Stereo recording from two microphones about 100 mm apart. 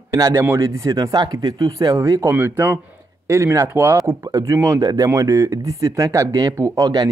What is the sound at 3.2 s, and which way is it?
Speech, 30° right (ahead or behind).